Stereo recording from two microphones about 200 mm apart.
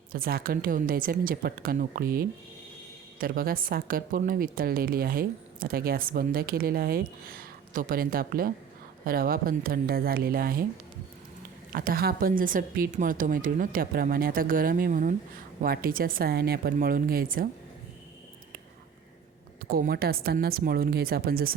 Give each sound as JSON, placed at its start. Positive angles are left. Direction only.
{"t": 0.1, "sound": "a woman's voice", "side_deg": -45}
{"t": 11.7, "sound": "a woman's voice", "side_deg": -45}
{"t": 19.6, "sound": "a woman's voice", "side_deg": -45}